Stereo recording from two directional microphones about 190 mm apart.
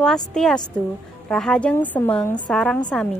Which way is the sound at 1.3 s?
5° left (ahead or behind).